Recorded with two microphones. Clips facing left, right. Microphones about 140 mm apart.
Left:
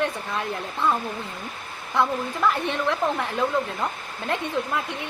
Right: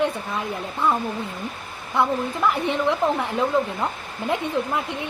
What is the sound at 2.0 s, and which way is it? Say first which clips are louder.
A woman's voice: right 2 dB; 15° right (ahead or behind).